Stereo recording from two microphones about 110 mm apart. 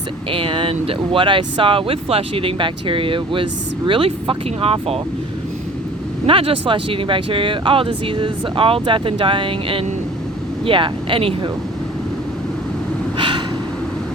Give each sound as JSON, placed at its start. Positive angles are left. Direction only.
{"t": 0.3, "sound": "speech", "side_deg": -50}
{"t": 6.2, "sound": "speech", "side_deg": -55}
{"t": 13.1, "sound": "gasp", "side_deg": -50}